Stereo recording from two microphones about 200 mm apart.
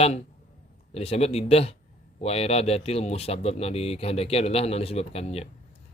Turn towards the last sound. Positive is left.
turn(degrees=30)  # may be behind; listen again after turning